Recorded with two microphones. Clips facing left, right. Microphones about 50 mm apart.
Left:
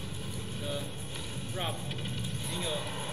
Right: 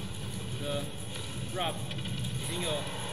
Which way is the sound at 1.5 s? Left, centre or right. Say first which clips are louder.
Right 3 dB; centre.